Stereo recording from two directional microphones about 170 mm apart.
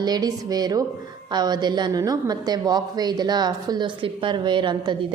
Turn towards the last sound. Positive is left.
turn(degrees=-30)  # may be behind; listen again after turning